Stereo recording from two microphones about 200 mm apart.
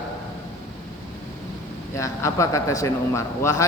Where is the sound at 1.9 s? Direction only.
15° left (ahead or behind).